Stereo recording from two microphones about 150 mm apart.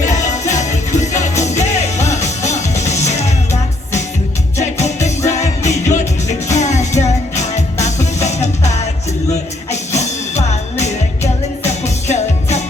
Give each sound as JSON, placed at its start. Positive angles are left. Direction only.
{"t": 0.0, "sound": "music", "side_deg": 50}
{"t": 9.7, "sound": "music", "side_deg": 50}